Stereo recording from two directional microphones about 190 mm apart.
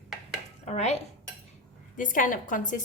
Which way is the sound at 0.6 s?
35° left (ahead or behind).